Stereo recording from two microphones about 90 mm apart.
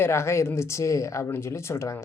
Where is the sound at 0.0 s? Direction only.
30° left (ahead or behind).